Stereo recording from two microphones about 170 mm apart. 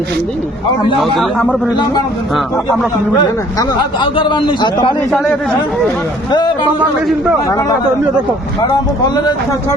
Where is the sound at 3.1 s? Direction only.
25° left (ahead or behind).